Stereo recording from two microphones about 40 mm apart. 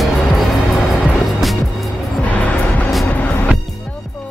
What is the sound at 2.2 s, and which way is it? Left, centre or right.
Music, left.